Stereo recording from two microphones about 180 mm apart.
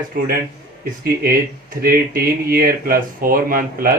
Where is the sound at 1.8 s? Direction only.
55° right (ahead or behind).